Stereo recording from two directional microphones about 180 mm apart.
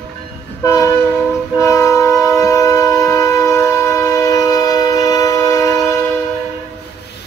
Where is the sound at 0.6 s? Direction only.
20° left (ahead or behind).